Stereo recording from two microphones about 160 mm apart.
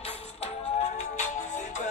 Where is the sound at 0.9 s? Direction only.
45° left (ahead or behind).